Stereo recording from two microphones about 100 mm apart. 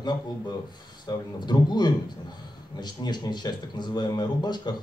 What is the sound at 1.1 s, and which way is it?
Speech, 45° left (ahead or behind).